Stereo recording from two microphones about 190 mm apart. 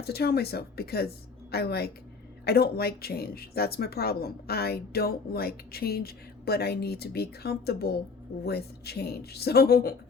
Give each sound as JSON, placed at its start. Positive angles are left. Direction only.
{"t": 0.0, "sound": "speech", "side_deg": 55}